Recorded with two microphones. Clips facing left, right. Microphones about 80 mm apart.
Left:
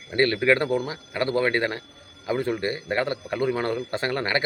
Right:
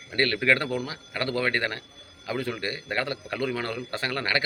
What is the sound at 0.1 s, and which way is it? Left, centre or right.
A man's voice, left.